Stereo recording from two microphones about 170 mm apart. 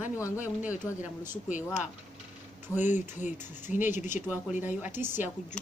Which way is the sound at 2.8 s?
45° left (ahead or behind).